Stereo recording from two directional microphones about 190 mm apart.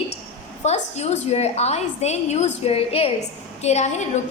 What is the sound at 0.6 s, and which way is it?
A woman's voice, 35° left (ahead or behind).